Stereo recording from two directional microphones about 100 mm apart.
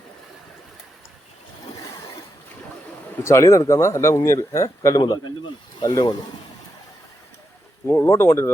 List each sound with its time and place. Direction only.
3.2 s speech: 30° left (ahead or behind)
7.9 s speech: 25° left (ahead or behind)